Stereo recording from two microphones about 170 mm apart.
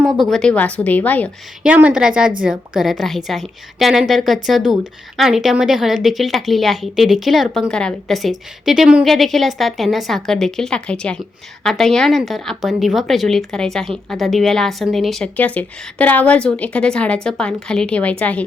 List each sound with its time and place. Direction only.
0.0 s a woman's voice: centre (ahead or behind)
1.6 s a woman's voice: 5° right (ahead or behind); by 18.4 s 10° left (ahead or behind)